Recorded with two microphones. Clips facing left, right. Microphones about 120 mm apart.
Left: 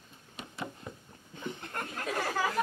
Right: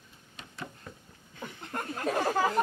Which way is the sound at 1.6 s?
25° right (ahead or behind).